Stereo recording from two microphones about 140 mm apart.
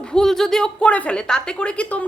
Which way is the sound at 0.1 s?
5° left (ahead or behind).